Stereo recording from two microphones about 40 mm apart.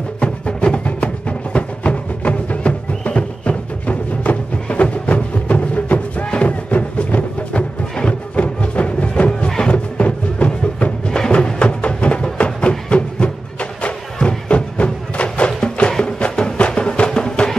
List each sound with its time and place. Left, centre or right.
0.2 s music: left
7.9 s music: left
8.4 s music: left
11.1 s music: centre